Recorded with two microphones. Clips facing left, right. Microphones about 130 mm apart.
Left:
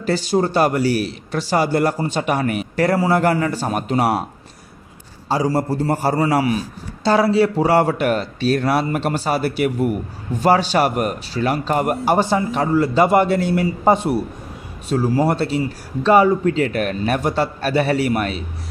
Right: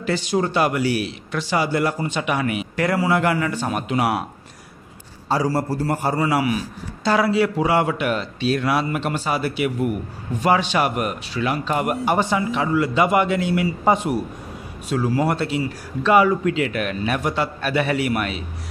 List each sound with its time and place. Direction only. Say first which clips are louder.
0.0 s a man's voice: left 3 dB; 35° left (ahead or behind)
5.3 s a man's voice: left 2 dB; 20° left (ahead or behind)
6.0 s a man's voice: left 3 dB; 35° left (ahead or behind)